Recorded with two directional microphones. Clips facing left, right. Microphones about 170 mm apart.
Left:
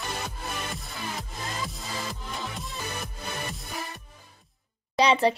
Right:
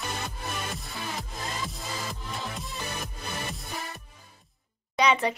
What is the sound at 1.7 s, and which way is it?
Music, centre (ahead or behind).